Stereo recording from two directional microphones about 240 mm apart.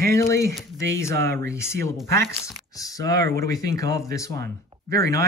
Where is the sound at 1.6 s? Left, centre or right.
Centre.